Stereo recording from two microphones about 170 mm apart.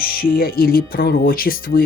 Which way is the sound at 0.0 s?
60° left (ahead or behind).